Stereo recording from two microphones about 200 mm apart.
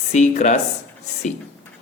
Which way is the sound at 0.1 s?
35° left (ahead or behind).